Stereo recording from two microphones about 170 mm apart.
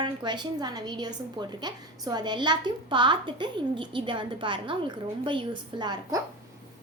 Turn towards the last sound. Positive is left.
turn(degrees=-25)  # may be behind; listen again after turning